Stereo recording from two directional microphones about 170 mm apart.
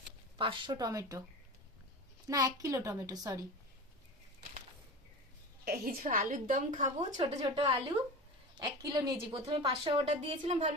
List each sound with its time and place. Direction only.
0.3 s a woman's voice: 30° right (ahead or behind)
2.2 s a woman's voice: 20° right (ahead or behind)
5.6 s a woman's voice: 55° right (ahead or behind)
7.2 s a woman's voice: 35° right (ahead or behind)